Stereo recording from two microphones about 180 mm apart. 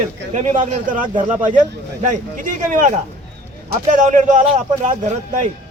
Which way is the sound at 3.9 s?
45° right (ahead or behind).